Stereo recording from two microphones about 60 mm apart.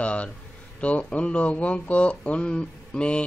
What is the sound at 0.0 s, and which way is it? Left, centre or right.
Speech, left.